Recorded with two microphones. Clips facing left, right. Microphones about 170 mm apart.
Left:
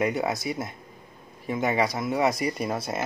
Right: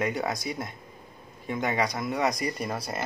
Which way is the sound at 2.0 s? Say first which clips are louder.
Left 3 dB; 25° left (ahead or behind).